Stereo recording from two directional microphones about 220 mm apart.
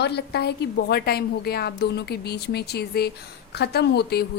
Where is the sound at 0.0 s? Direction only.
50° left (ahead or behind).